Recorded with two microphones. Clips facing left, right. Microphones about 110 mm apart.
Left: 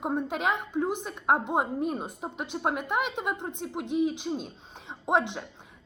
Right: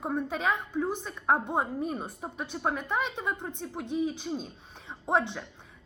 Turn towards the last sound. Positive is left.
turn(degrees=15)  # may be behind; listen again after turning